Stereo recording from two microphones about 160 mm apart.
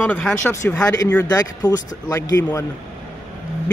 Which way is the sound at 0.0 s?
5° left (ahead or behind).